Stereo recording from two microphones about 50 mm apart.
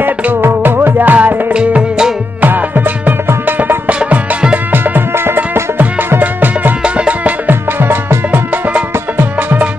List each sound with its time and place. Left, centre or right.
0.0 s music: right
1.5 s music: centre
2.4 s music: right
4.0 s music: right
4.7 s music: right
6.8 s music: right